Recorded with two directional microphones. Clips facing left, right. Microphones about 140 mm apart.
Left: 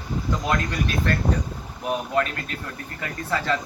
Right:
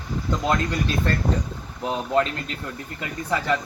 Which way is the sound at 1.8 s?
25° right (ahead or behind).